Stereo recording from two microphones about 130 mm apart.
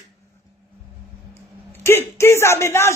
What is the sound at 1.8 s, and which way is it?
A man's voice, 20° left (ahead or behind).